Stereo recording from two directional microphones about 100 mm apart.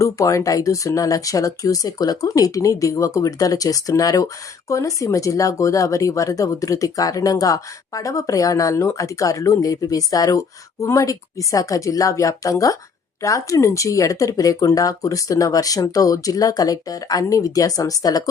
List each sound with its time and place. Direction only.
0.0 s speech: 35° left (ahead or behind)